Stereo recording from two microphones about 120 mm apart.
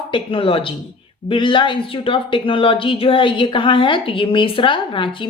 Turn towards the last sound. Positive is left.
turn(degrees=45)  # may be behind; listen again after turning